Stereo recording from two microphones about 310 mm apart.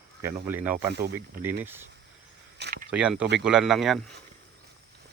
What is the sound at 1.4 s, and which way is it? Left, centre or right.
Speech, centre.